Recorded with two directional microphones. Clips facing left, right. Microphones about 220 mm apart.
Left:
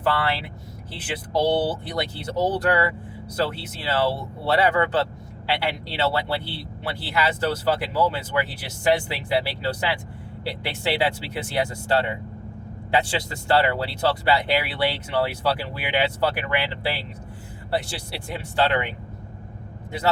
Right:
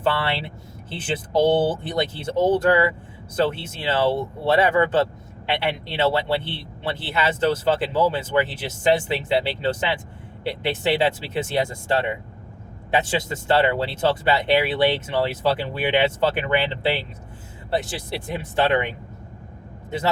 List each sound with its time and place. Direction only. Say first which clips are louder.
0.0 s speech: right 1 dB; 25° right (ahead or behind)